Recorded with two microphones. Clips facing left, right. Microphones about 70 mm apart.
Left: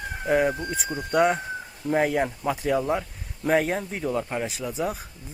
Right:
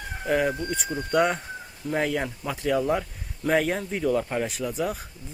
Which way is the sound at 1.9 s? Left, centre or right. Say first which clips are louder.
Left 3 dB; left.